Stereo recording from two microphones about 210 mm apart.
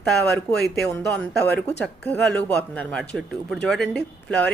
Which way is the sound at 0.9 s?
5° left (ahead or behind).